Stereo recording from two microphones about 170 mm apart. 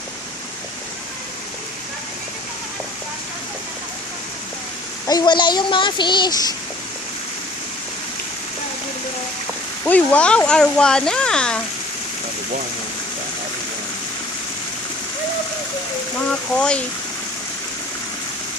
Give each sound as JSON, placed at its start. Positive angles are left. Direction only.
{"t": 5.0, "sound": "speech", "side_deg": 25}
{"t": 9.8, "sound": "speech", "side_deg": 10}
{"t": 16.3, "sound": "speech", "side_deg": 5}